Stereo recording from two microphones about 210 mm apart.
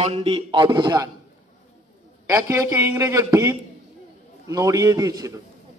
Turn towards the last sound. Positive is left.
turn(degrees=-15)  # may be behind; listen again after turning